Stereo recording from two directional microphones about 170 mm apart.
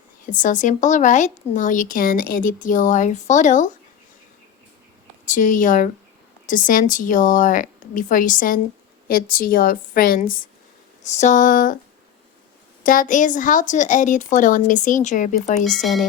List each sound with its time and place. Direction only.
0.3 s speech: 50° left (ahead or behind)
5.2 s speech: 50° left (ahead or behind)
11.0 s speech: 45° left (ahead or behind)
12.8 s speech: 55° left (ahead or behind)
15.6 s speech: centre (ahead or behind)